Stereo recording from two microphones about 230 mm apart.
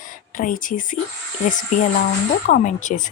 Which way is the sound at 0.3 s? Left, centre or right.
Left.